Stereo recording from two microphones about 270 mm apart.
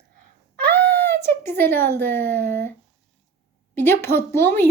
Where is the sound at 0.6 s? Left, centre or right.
Centre.